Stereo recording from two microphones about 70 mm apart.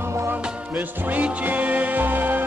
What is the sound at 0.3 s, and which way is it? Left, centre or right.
Music, right.